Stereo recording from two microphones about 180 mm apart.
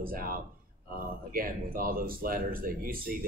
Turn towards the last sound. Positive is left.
turn(degrees=-50)  # may be behind; listen again after turning